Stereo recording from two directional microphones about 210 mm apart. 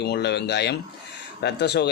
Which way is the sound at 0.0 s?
50° left (ahead or behind).